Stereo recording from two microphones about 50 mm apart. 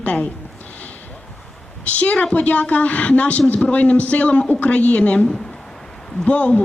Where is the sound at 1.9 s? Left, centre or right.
Left.